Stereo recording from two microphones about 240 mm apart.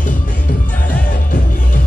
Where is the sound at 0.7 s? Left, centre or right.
Centre.